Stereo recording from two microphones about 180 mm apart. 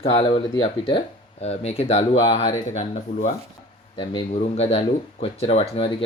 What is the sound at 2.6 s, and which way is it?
Speech, 40° left (ahead or behind).